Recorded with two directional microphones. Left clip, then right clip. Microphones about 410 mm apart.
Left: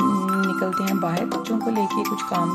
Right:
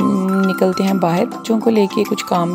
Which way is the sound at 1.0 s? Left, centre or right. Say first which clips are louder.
Right 7 dB; centre.